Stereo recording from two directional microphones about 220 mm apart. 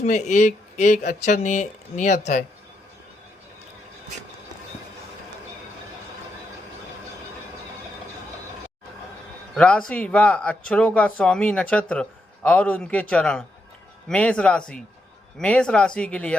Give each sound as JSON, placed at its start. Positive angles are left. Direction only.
{"t": 0.0, "sound": "speech", "side_deg": 35}
{"t": 9.6, "sound": "speech", "side_deg": 5}